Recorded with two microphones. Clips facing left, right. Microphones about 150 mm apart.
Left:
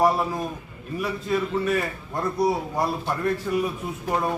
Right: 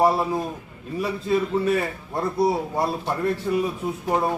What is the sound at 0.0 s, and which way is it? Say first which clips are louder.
A man's voice: right 1 dB; 25° right (ahead or behind).